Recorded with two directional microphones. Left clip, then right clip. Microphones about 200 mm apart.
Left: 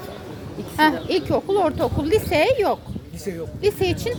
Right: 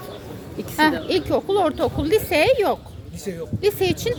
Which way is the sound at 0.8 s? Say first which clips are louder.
Even; 10° right (ahead or behind).